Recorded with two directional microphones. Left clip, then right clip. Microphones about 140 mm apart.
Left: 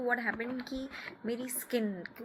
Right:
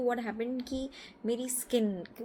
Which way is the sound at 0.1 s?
35° right (ahead or behind).